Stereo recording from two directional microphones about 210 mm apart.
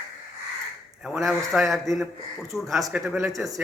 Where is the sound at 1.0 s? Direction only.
Centre (ahead or behind).